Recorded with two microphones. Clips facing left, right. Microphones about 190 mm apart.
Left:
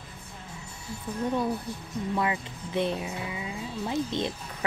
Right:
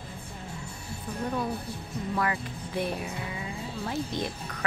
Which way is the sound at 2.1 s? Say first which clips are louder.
Even; 20° left (ahead or behind).